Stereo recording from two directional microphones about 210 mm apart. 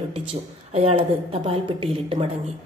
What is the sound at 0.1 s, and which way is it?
A woman's voice, 30° right (ahead or behind).